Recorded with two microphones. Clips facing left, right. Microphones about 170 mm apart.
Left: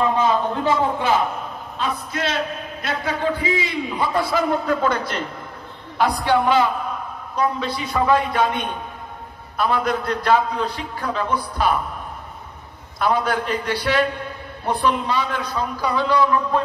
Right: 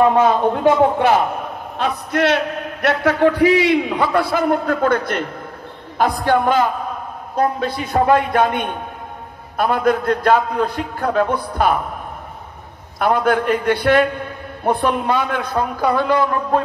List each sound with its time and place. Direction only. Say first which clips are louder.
0.0 s a man's voice: right 5 dB; 60° right (ahead or behind)
13.0 s a man's voice: right 4 dB; 55° right (ahead or behind)